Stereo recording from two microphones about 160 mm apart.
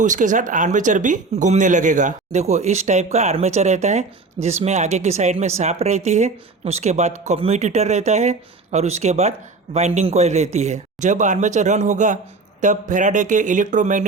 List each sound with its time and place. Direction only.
0.0 s speech: 50° right (ahead or behind)